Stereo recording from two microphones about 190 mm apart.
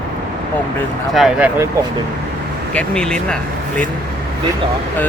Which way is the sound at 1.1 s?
Centre (ahead or behind).